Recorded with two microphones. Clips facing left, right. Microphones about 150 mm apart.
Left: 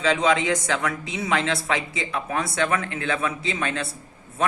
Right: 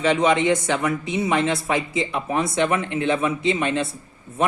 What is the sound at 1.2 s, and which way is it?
A woman's voice, 25° right (ahead or behind).